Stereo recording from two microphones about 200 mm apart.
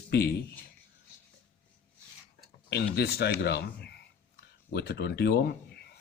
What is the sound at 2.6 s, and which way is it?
A man's voice, 55° left (ahead or behind).